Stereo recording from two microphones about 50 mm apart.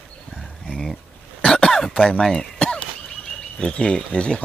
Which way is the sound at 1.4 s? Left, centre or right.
Centre.